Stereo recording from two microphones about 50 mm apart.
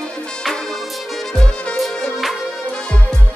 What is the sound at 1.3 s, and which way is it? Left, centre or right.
Music, centre.